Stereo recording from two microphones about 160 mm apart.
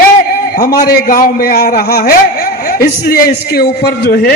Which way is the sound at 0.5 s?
65° left (ahead or behind).